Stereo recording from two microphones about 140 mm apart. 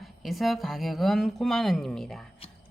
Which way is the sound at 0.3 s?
Centre (ahead or behind).